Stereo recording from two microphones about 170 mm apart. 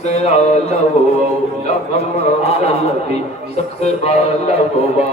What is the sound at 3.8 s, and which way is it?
Music, 40° left (ahead or behind).